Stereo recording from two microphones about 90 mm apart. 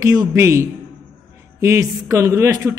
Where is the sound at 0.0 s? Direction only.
40° right (ahead or behind).